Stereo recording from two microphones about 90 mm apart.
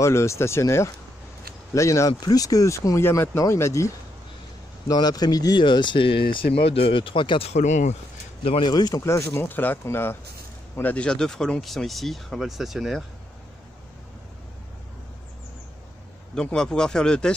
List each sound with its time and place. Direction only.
0.0 s speech: 30° left (ahead or behind)
4.8 s speech: 45° left (ahead or behind); by 7.4 s 70° left (ahead or behind)
8.6 s speech: 50° left (ahead or behind)
9.0 s speech: 30° left (ahead or behind)
10.8 s speech: 15° left (ahead or behind); by 13.0 s 5° right (ahead or behind)
16.5 s speech: 10° left (ahead or behind)